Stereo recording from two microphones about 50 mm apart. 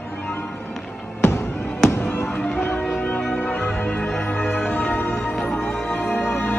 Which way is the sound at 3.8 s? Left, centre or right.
Centre.